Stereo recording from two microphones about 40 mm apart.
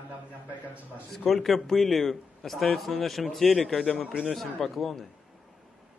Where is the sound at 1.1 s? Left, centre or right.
Centre.